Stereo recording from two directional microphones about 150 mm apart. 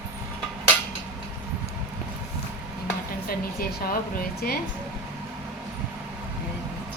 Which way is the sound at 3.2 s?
75° left (ahead or behind).